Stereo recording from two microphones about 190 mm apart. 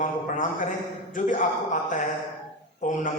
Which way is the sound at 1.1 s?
45° left (ahead or behind).